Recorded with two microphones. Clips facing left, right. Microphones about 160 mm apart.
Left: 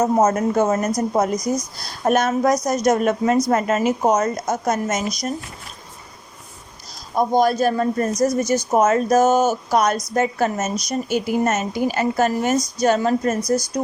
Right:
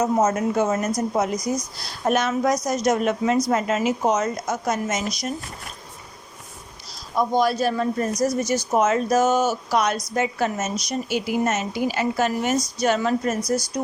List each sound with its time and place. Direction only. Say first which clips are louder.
0.0 s a woman's voice: left 3 dB; 40° left (ahead or behind)
7.2 s a woman's voice: left 3 dB; 45° left (ahead or behind)